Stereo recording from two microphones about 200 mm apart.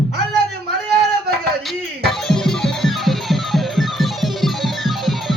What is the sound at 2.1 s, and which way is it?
Music, centre (ahead or behind).